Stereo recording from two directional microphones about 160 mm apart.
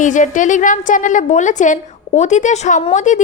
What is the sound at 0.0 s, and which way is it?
A woman's voice, 50° left (ahead or behind).